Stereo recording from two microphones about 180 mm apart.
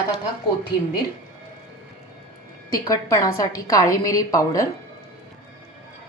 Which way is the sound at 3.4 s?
20° left (ahead or behind).